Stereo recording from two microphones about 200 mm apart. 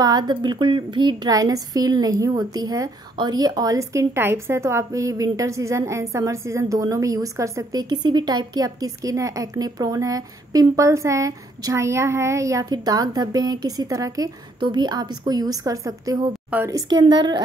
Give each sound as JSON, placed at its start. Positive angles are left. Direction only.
{"t": 0.0, "sound": "a woman's voice", "side_deg": -20}